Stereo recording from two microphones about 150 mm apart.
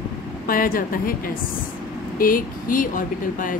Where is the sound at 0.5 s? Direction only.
70° left (ahead or behind).